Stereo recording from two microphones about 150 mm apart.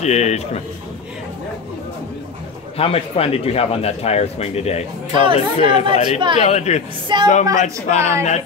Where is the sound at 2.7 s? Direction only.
40° left (ahead or behind).